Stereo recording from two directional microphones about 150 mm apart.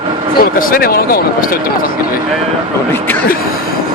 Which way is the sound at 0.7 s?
80° left.